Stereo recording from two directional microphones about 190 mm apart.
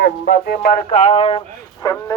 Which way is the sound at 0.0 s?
55° left (ahead or behind).